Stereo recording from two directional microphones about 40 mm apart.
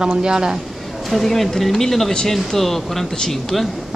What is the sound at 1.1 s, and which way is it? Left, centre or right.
Speech, centre.